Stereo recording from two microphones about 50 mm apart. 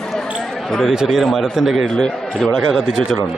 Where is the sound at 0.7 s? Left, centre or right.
Centre.